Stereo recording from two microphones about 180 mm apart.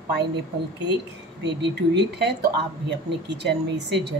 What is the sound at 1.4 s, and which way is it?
Speech, 75° right (ahead or behind).